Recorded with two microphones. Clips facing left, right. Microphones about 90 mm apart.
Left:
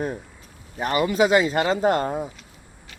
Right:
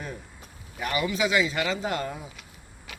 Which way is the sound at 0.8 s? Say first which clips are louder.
Left 7 dB; 40° left (ahead or behind).